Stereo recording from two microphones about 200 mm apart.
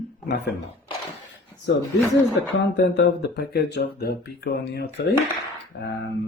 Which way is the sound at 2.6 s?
60° left (ahead or behind).